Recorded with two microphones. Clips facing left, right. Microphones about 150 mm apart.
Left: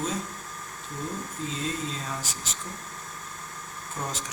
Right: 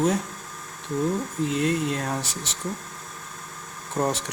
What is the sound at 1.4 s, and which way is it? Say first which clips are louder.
Speech: right 8 dB; 65° right (ahead or behind).